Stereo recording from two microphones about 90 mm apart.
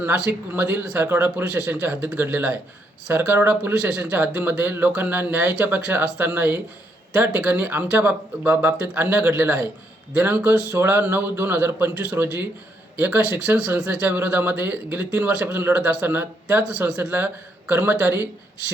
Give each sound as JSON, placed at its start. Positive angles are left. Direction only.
{"t": 0.0, "sound": "speech", "side_deg": -20}